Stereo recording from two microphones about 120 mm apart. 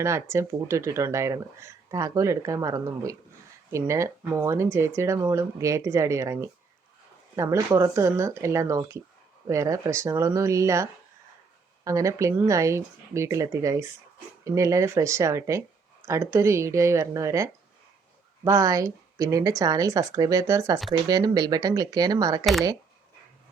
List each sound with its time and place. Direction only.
0.0 s speech: 25° right (ahead or behind)
11.9 s speech: 25° right (ahead or behind)